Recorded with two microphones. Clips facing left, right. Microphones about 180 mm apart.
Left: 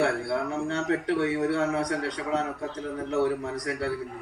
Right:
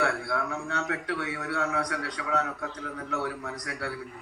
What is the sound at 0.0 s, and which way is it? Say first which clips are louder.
A man's voice: left 3 dB; 30° left (ahead or behind).